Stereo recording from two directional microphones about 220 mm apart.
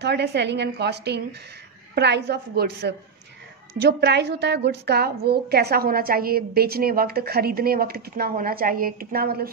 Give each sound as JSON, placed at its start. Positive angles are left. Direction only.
{"t": 0.0, "sound": "a woman's voice", "side_deg": -50}